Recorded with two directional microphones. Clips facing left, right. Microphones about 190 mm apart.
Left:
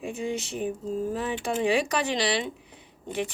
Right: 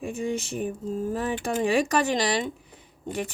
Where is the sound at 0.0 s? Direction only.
45° right (ahead or behind).